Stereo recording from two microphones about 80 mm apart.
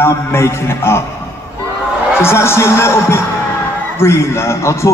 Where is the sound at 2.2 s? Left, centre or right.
Left.